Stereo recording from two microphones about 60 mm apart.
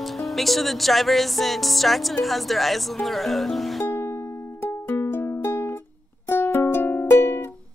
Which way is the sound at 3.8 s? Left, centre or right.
Left.